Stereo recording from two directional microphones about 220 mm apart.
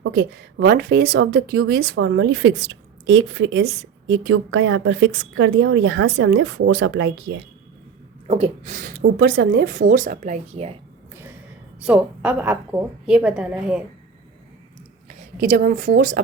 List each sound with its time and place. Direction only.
0.0 s a woman's voice: 55° right (ahead or behind)
8.3 s speech: 30° right (ahead or behind)
11.8 s a woman's voice: 5° right (ahead or behind)
15.0 s a woman's voice: 40° right (ahead or behind)